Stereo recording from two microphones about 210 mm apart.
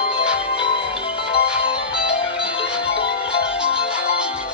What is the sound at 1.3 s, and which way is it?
Music, 25° left (ahead or behind).